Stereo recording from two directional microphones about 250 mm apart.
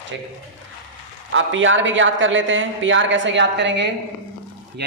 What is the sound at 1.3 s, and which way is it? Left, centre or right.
A man's voice, right.